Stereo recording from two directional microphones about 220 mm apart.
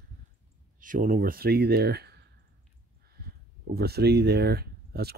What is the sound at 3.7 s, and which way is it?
Speech, 45° right (ahead or behind).